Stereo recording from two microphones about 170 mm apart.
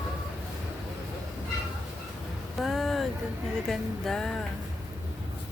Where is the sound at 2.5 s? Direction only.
Centre (ahead or behind).